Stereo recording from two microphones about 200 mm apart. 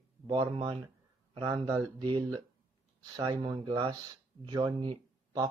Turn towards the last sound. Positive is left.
turn(degrees=-25)  # may be behind; listen again after turning